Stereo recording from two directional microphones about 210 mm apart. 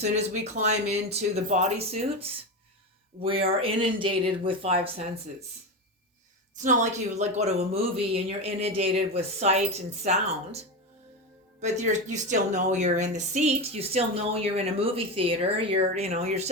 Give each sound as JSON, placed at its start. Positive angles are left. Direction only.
{"t": 0.0, "sound": "speech", "side_deg": -35}
{"t": 6.6, "sound": "speech", "side_deg": -35}
{"t": 11.6, "sound": "speech", "side_deg": -35}